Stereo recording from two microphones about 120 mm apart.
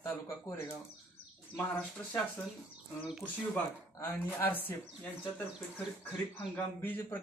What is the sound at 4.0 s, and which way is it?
Speech, 20° left (ahead or behind).